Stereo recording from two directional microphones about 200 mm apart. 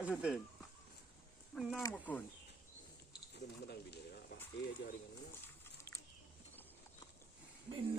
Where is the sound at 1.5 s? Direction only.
10° left (ahead or behind).